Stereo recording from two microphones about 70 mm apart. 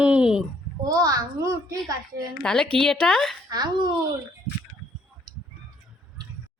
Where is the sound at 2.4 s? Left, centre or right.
Centre.